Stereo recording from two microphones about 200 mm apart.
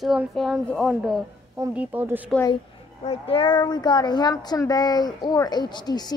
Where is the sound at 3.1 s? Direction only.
25° left (ahead or behind).